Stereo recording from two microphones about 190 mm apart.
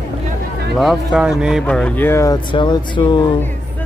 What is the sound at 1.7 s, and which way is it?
Speech, 10° left (ahead or behind).